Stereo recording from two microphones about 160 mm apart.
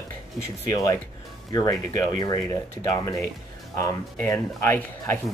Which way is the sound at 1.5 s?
20° left (ahead or behind).